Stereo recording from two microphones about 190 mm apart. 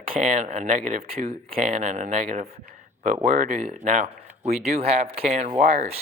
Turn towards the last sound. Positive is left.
turn(degrees=-35)  # may be behind; listen again after turning